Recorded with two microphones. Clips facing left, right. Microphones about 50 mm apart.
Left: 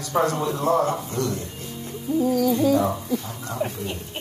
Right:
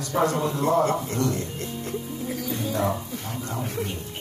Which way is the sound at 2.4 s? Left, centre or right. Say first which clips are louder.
Left 10 dB; left.